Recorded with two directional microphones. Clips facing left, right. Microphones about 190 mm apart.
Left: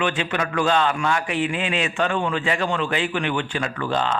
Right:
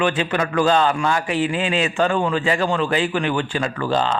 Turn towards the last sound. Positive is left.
turn(degrees=-30)  # may be behind; listen again after turning